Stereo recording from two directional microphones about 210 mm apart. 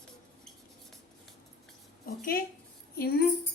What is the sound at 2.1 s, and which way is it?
A woman's voice, 45° left (ahead or behind).